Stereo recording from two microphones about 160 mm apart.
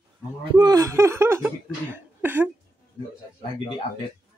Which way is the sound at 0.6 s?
25° right (ahead or behind).